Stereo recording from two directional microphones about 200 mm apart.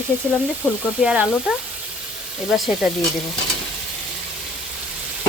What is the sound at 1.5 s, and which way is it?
Speech, 5° right (ahead or behind).